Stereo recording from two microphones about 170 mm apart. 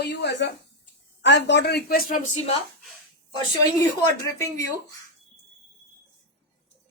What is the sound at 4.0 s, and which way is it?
Speech, 20° left (ahead or behind).